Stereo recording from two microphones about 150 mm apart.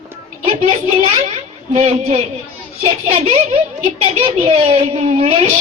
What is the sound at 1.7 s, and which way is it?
Speech, 40° right (ahead or behind).